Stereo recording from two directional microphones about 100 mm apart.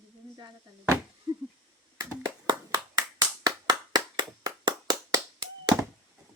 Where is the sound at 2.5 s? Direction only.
40° right (ahead or behind).